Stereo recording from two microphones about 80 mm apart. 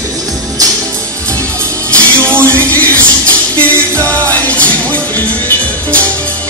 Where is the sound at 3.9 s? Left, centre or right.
Right.